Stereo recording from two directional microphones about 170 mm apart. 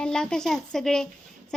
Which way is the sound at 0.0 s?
5° left (ahead or behind).